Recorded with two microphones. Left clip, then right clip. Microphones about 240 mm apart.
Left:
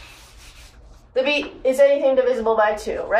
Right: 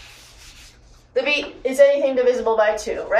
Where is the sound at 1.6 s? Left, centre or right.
Centre.